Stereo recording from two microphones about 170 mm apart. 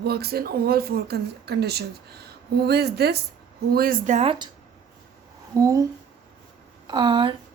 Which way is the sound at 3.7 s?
60° right (ahead or behind).